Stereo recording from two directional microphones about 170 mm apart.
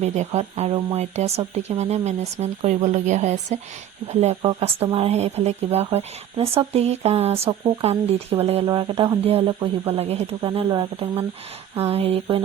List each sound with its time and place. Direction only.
0.0 s speech: 40° right (ahead or behind)
8.6 s speech: 25° right (ahead or behind)